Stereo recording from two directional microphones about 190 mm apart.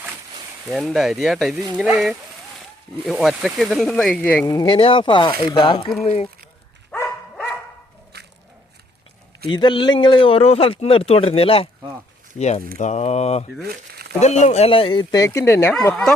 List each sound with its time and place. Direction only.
0.7 s speech: centre (ahead or behind)
4.4 s speech: 25° left (ahead or behind)
6.9 s dog: 10° left (ahead or behind)
8.1 s biting: 60° right (ahead or behind)
9.5 s speech: 25° left (ahead or behind)
12.4 s mantra: 35° left (ahead or behind)
13.6 s speech: 55° right (ahead or behind)
14.2 s speech: 35° left (ahead or behind); by 16.1 s 5° left (ahead or behind)